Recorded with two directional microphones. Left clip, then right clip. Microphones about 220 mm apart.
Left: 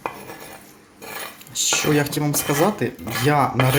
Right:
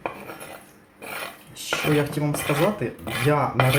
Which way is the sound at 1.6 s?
50° left (ahead or behind).